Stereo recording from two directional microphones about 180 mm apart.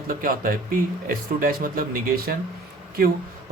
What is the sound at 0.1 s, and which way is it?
Speech, 50° right (ahead or behind).